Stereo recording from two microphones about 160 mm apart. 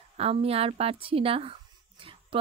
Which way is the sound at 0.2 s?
40° right (ahead or behind).